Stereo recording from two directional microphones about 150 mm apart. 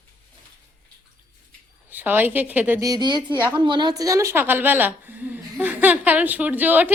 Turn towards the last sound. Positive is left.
turn(degrees=-10)  # may be behind; listen again after turning